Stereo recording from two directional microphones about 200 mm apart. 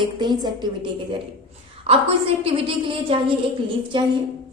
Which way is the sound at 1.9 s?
30° right (ahead or behind).